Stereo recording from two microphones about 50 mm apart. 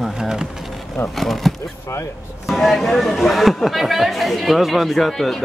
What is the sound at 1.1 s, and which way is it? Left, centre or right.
Speech, centre.